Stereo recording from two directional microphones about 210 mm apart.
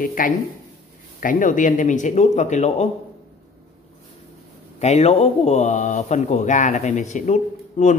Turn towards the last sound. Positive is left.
turn(degrees=35)  # may be behind; listen again after turning